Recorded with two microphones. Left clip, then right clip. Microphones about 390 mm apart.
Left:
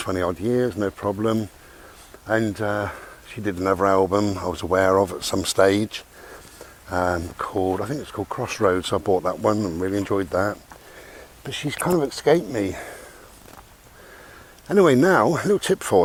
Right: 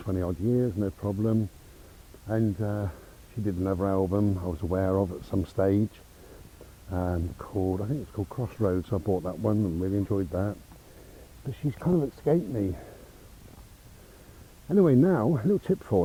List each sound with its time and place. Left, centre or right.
0.0 s speech: centre
14.7 s speech: centre